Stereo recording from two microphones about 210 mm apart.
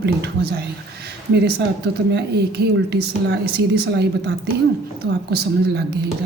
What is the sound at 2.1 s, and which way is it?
A woman's voice, 55° right (ahead or behind).